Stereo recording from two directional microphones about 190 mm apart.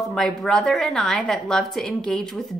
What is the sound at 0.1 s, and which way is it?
A woman's voice, 5° left (ahead or behind).